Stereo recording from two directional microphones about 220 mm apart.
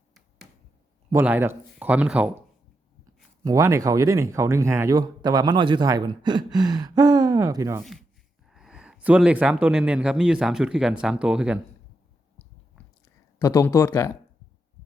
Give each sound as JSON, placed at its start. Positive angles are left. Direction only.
{"t": 1.1, "sound": "speech", "side_deg": -10}
{"t": 3.4, "sound": "speech", "side_deg": -15}
{"t": 8.4, "sound": "speech", "side_deg": 0}
{"t": 13.4, "sound": "speech", "side_deg": 15}